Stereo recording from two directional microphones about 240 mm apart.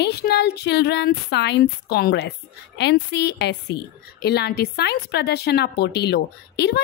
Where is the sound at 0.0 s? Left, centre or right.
Left.